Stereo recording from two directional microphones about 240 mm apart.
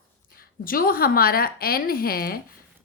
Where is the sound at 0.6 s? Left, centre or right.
Left.